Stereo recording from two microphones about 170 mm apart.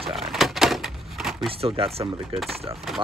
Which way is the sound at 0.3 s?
Centre (ahead or behind).